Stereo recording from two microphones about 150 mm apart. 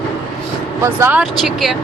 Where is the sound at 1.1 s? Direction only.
Centre (ahead or behind).